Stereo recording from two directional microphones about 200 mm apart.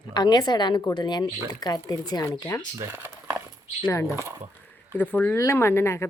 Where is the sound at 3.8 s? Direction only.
15° left (ahead or behind).